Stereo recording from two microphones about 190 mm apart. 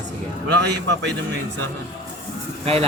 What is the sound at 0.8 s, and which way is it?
Speech, 70° right (ahead or behind).